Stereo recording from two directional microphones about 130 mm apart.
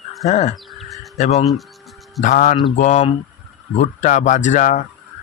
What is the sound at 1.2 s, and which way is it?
Speech, 60° left (ahead or behind).